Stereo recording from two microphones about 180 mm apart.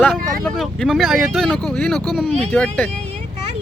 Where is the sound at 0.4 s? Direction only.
Centre (ahead or behind).